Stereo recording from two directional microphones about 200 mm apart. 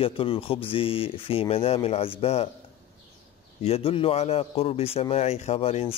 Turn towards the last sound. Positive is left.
turn(degrees=30)  # may be behind; listen again after turning